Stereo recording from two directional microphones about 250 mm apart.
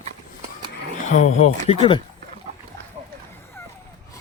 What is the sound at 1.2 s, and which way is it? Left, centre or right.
Speech, left.